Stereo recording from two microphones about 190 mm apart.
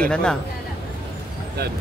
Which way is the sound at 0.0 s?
5° left (ahead or behind).